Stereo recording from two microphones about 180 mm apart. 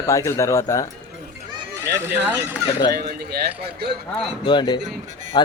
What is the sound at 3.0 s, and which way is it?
Speech, 60° right (ahead or behind).